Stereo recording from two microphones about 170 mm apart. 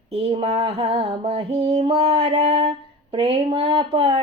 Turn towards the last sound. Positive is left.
turn(degrees=-30)  # may be behind; listen again after turning